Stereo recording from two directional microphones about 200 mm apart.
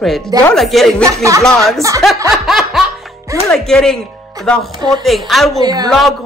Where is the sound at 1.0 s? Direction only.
15° right (ahead or behind).